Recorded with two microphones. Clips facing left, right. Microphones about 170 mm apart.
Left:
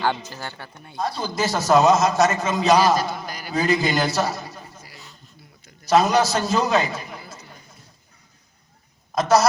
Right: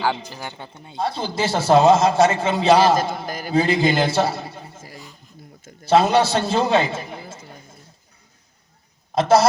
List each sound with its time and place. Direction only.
0.3 s a man's voice: 15° right (ahead or behind); by 2.7 s 30° right (ahead or behind)
2.9 s a sound: 50° right (ahead or behind)
3.5 s a man's voice: 30° right (ahead or behind)
5.8 s a man's voice: 30° right (ahead or behind)
9.1 s a woman's voice: 30° right (ahead or behind)